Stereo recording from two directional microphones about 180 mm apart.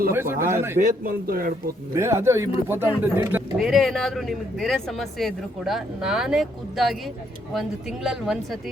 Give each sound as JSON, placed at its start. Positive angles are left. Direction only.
{"t": 0.1, "sound": "speech", "side_deg": -15}
{"t": 0.8, "sound": "a man's voice", "side_deg": -55}
{"t": 2.0, "sound": "speech", "side_deg": -15}
{"t": 3.6, "sound": "speech", "side_deg": 0}